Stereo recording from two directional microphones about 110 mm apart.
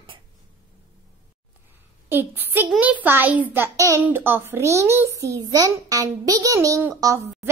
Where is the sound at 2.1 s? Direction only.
15° right (ahead or behind).